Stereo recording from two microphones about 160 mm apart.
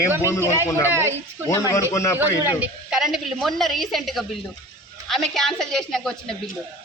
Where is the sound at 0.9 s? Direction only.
15° right (ahead or behind).